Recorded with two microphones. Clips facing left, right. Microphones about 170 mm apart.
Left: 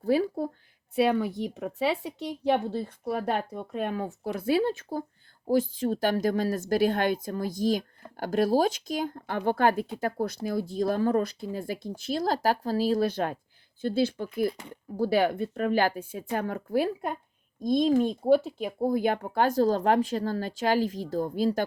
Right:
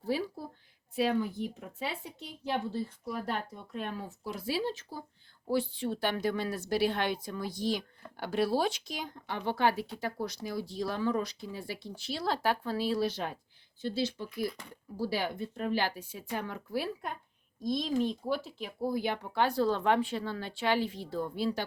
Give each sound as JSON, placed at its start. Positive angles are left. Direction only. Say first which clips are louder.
{"t": 0.0, "sound": "speech", "louder": "left 8 dB", "side_deg": 55}
{"t": 0.9, "sound": "a woman's voice", "louder": "left 5 dB", "side_deg": 65}
{"t": 2.5, "sound": "speech", "louder": "left 7 dB", "side_deg": 65}